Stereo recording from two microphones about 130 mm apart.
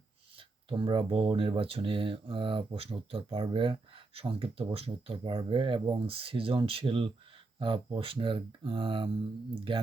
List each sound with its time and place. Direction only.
0.3 s speech: 40° right (ahead or behind)